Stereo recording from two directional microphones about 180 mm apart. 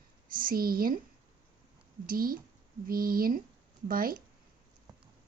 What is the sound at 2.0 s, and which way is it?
A woman's voice, 55° right (ahead or behind).